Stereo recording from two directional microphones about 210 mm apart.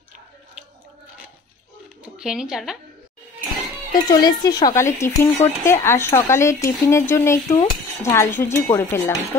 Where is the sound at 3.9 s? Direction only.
20° left (ahead or behind).